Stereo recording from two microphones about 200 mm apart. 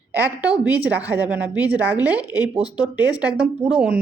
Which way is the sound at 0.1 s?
10° right (ahead or behind).